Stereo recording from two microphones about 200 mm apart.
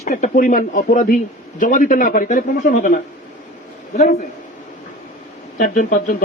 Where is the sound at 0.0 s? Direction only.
40° left (ahead or behind).